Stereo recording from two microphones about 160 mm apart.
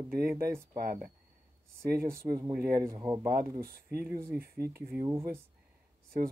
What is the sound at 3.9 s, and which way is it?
Speech, 75° right (ahead or behind).